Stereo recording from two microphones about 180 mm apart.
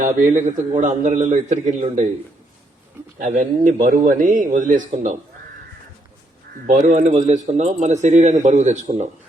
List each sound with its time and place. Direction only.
0.0 s speech: 45° right (ahead or behind)
3.2 s speech: 45° right (ahead or behind)
6.7 s speech: 45° right (ahead or behind)